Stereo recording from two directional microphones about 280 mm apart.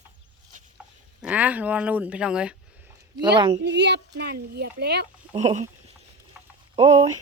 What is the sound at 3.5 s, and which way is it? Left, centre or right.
Speech, right.